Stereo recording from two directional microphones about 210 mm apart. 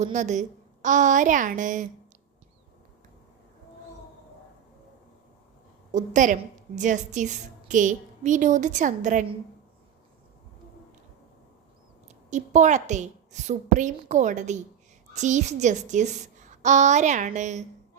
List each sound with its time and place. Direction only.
0.0 s a woman's voice: 35° right (ahead or behind)
5.9 s a woman's voice: 35° right (ahead or behind)
12.0 s a woman's voice: 35° right (ahead or behind)